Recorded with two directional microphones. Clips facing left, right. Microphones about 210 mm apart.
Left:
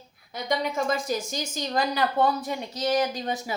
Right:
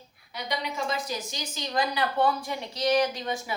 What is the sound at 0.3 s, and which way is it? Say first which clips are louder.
A woman's voice: left 5 dB; 45° left (ahead or behind).